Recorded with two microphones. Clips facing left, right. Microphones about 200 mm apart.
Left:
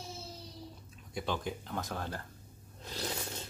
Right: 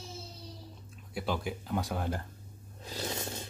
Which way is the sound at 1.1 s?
5° right (ahead or behind).